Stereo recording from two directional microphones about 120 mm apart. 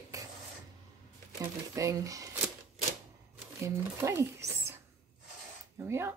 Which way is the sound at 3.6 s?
25° right (ahead or behind).